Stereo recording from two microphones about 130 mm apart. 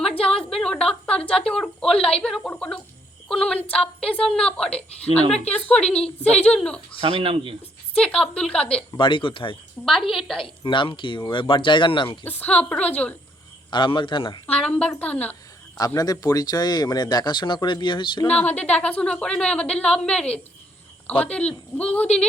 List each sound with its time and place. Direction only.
0.5 s a sound: 5° left (ahead or behind)
1.5 s a woman's voice: 5° left (ahead or behind)
7.0 s speech: 45° right (ahead or behind)
7.9 s a woman's voice: 5° left (ahead or behind)
9.0 s speech: 40° left (ahead or behind)
9.8 s speech: centre (ahead or behind)
10.4 s speech: 40° left (ahead or behind)
12.2 s a woman's voice: 15° left (ahead or behind)
13.7 s speech: 35° left (ahead or behind)
14.4 s a woman's voice: 10° left (ahead or behind)
16.0 s speech: 30° left (ahead or behind)
18.3 s a woman's voice: 10° left (ahead or behind)